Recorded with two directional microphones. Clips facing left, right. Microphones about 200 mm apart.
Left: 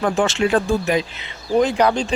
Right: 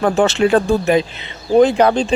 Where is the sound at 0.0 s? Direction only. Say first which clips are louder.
Right 4 dB; 40° right (ahead or behind).